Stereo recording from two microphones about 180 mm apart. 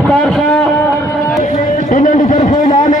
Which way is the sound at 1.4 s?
45° left (ahead or behind).